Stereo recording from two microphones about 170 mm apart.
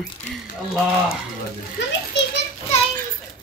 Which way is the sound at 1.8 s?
90° left.